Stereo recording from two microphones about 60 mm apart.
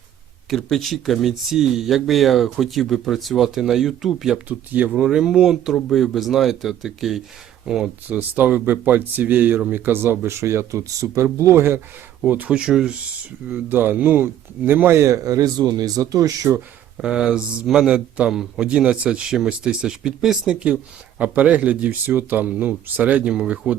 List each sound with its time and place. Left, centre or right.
0.5 s speech: centre
4.4 s speech: right
5.0 s speech: centre
8.0 s speech: right
11.5 s speech: right
12.3 s speech: right
12.5 s speech: centre
13.5 s speech: right
15.0 s speech: right
17.0 s speech: centre
18.3 s speech: centre
18.7 s speech: centre
23.3 s speech: centre